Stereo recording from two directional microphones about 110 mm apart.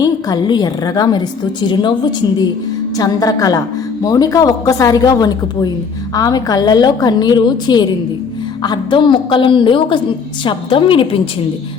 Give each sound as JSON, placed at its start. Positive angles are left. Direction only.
{"t": 0.0, "sound": "a woman's voice", "side_deg": 40}